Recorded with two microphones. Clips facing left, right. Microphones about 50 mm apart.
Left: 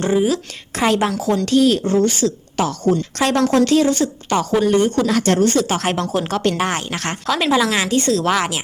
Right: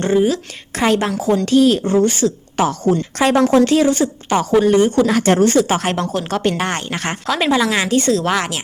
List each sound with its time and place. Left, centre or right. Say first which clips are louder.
0.0 s speech: right 2 dB; centre
1.1 s a woman's voice: right 2 dB; centre
5.2 s speech: right 2 dB; right
5.5 s a woman's voice: right 3 dB; centre
5.9 s speech: even; centre